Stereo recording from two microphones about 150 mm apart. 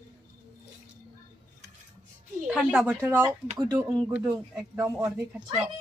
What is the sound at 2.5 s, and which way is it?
Speech, 5° right (ahead or behind).